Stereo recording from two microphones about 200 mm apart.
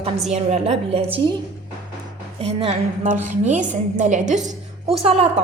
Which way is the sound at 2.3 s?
30° right (ahead or behind).